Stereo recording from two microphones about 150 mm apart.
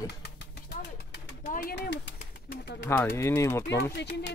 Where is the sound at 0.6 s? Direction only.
90° left.